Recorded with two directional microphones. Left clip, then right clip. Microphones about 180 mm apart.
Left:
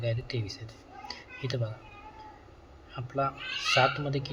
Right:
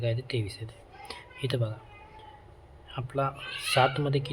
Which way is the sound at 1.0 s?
15° right (ahead or behind).